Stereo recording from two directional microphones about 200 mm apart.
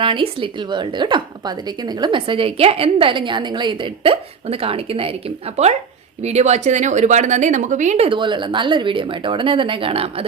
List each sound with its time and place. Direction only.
0.0 s speech: 25° right (ahead or behind)